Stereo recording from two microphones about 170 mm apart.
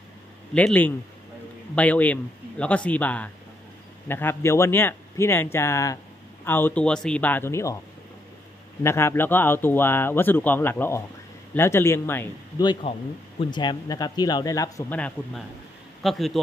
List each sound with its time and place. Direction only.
0.6 s a man's voice: 10° left (ahead or behind)
8.8 s a man's voice: 15° left (ahead or behind)
12.8 s speech: 35° left (ahead or behind)
15.0 s a man's voice: 5° left (ahead or behind)